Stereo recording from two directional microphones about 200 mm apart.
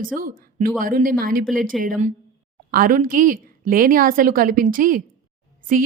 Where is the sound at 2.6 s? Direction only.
45° right (ahead or behind).